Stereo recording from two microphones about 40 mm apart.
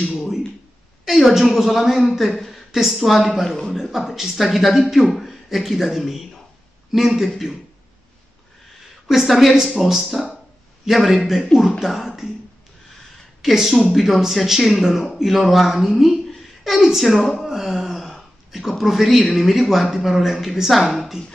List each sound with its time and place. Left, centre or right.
0.1 s a sound: centre
1.0 s a man's voice: centre
3.4 s a man's voice: centre
3.7 s a man's voice: centre
9.0 s a man's voice: centre
13.4 s a man's voice: centre